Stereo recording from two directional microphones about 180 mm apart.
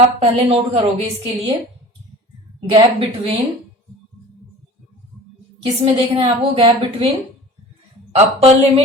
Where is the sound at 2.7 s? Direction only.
30° right (ahead or behind).